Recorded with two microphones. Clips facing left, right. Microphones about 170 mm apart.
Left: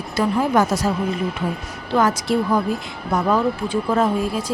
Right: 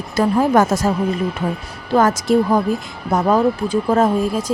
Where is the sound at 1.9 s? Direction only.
45° right (ahead or behind).